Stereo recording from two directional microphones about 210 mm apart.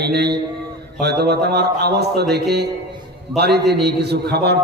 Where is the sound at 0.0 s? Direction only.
50° right (ahead or behind).